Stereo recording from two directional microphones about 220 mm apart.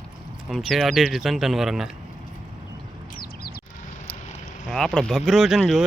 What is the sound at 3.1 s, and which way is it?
Bird, 45° left (ahead or behind).